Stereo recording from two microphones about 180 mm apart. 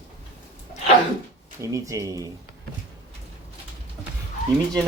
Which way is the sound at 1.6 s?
15° right (ahead or behind).